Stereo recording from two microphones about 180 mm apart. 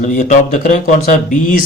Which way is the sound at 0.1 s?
40° left (ahead or behind).